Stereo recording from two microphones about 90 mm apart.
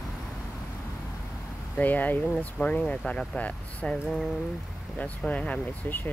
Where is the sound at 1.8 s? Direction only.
20° left (ahead or behind).